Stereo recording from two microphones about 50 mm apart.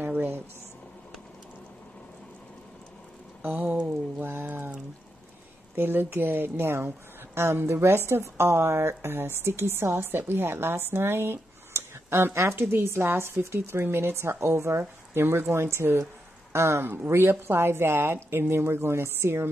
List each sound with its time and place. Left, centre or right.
3.4 s speech: right
4.2 s speech: right
5.8 s a woman's voice: right
10.0 s a woman's voice: right